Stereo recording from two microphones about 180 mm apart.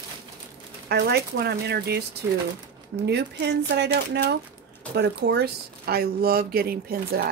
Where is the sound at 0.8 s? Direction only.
65° right (ahead or behind).